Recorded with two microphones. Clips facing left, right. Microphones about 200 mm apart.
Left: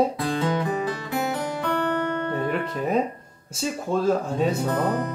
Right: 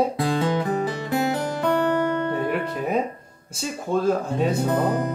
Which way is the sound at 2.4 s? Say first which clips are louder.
Right 1 dB; 5° right (ahead or behind).